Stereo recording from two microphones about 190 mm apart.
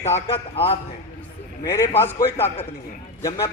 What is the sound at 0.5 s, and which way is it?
Speech, 30° left (ahead or behind).